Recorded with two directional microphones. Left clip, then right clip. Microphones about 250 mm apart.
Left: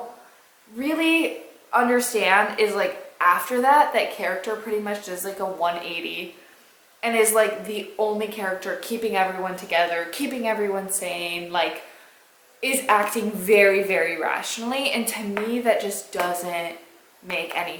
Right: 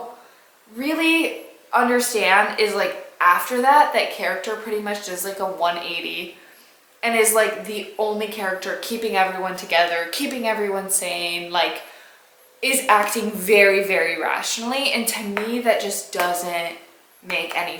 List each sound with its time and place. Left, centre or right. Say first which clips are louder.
0.8 s a woman's voice: right 2 dB; centre